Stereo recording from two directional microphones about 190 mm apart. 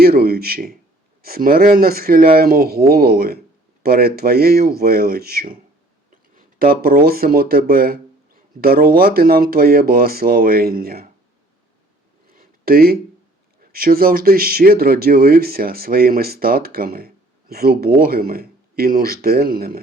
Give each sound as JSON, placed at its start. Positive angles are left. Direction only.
{"t": 0.0, "sound": "speech", "side_deg": -55}
{"t": 12.3, "sound": "a sound", "side_deg": -50}
{"t": 13.7, "sound": "speech", "side_deg": -50}